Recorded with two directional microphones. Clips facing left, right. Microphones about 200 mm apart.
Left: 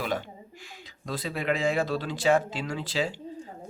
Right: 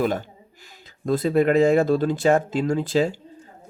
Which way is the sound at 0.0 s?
45° right (ahead or behind).